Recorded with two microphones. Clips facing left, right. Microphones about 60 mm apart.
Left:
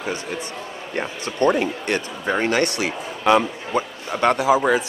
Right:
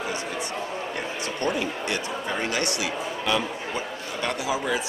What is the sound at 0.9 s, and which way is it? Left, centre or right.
Speech, left.